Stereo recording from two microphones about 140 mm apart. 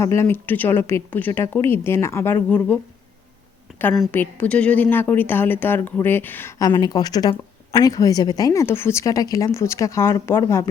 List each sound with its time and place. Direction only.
0.0 s a woman's voice: 20° left (ahead or behind)
3.7 s a sound: 5° right (ahead or behind)
4.1 s a woman's voice: 10° left (ahead or behind)
6.6 s speech: 30° left (ahead or behind)